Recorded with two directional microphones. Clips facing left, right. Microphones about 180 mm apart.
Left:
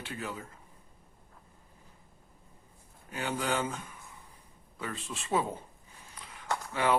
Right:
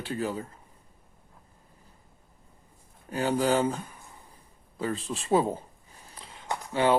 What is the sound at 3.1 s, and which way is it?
Speech, 35° right (ahead or behind).